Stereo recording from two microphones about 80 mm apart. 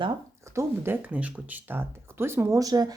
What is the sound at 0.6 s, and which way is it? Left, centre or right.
Speech, right.